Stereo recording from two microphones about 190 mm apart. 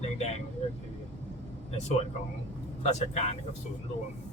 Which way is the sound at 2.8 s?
35° left (ahead or behind).